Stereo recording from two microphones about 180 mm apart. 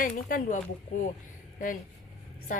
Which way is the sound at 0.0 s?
50° left (ahead or behind).